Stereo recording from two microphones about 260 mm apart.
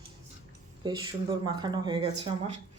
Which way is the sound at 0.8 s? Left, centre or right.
Centre.